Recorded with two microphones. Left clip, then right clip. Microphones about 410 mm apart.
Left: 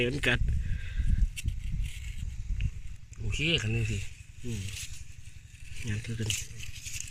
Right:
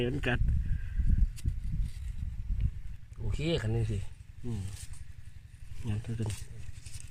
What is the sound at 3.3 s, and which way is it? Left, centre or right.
Speech, centre.